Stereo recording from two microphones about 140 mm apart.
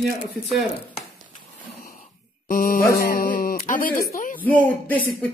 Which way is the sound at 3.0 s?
90° left.